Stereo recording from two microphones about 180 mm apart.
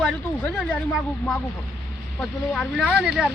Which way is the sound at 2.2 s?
Centre (ahead or behind).